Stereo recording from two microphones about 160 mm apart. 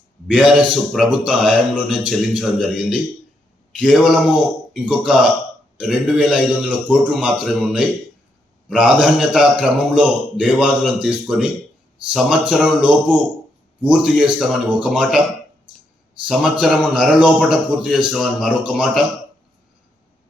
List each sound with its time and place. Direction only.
0.3 s a man's voice: 5° right (ahead or behind)
16.3 s a man's voice: centre (ahead or behind)